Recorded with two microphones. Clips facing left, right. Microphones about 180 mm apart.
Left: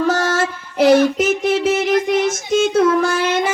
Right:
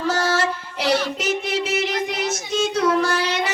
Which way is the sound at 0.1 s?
50° left (ahead or behind).